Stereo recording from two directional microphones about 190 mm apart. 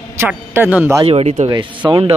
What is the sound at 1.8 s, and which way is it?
Speech, 20° right (ahead or behind).